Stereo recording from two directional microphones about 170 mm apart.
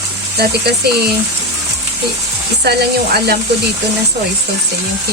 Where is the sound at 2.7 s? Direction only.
70° right (ahead or behind).